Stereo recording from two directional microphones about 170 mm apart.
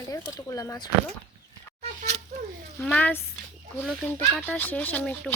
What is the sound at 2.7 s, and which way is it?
Speech, 5° left (ahead or behind).